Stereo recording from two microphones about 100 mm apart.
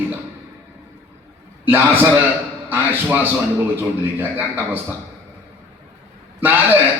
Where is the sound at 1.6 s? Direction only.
20° right (ahead or behind).